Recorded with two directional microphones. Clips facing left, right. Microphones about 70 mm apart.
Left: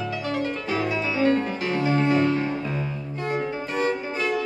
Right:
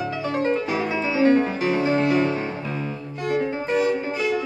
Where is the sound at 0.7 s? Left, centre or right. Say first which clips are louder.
Right 1 dB; centre.